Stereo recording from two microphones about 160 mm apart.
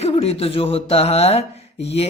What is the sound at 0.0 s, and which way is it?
Speech, 40° left (ahead or behind).